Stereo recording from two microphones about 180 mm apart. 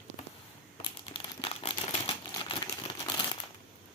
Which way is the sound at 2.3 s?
25° left (ahead or behind).